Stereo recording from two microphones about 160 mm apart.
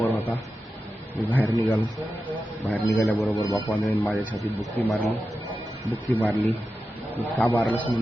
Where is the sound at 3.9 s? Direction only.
10° left (ahead or behind).